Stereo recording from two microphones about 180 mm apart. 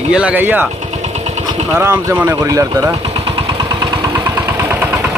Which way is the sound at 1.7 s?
15° right (ahead or behind).